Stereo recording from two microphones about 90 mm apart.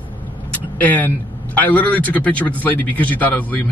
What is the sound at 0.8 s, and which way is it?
A man's voice, 20° left (ahead or behind).